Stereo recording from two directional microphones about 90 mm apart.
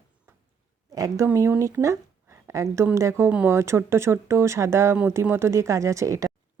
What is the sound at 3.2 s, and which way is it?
Speech, 20° right (ahead or behind).